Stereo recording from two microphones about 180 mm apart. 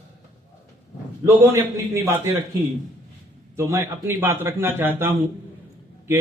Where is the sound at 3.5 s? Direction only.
15° right (ahead or behind).